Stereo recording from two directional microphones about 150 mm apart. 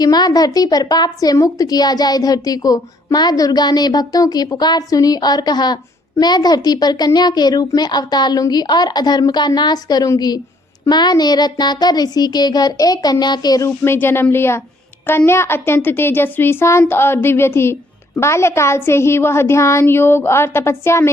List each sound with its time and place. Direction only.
0.0 s a woman's voice: 25° left (ahead or behind)